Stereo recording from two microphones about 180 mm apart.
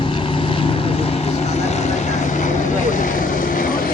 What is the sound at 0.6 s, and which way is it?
Vehicle, 30° left (ahead or behind).